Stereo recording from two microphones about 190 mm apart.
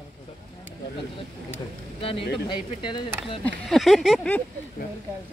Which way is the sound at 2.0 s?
30° left (ahead or behind).